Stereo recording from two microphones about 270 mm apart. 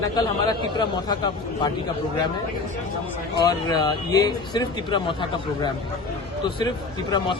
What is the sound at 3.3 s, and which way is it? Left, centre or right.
Speech, centre.